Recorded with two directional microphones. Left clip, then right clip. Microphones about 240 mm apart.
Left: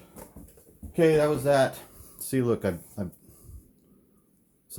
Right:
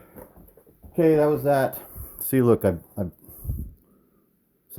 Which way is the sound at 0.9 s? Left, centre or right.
Right.